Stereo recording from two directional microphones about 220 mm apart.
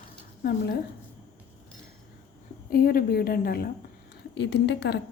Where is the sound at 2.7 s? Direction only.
45° left (ahead or behind).